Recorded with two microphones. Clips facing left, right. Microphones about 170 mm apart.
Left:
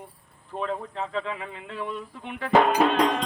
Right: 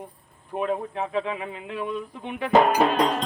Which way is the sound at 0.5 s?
15° right (ahead or behind).